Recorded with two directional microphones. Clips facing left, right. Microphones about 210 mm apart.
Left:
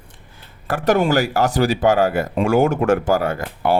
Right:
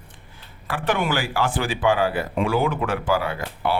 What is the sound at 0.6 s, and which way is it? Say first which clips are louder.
Speech: left 7 dB; 40° left (ahead or behind).